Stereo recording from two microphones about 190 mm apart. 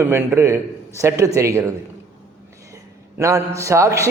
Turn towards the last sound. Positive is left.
turn(degrees=-15)  # may be behind; listen again after turning